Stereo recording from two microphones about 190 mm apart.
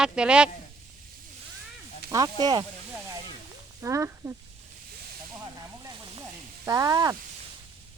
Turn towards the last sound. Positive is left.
turn(degrees=-20)  # may be behind; listen again after turning